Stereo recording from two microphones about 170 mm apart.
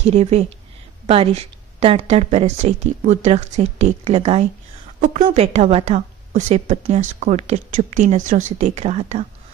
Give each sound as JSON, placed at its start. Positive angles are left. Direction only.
{"t": 0.0, "sound": "a woman's voice", "side_deg": -40}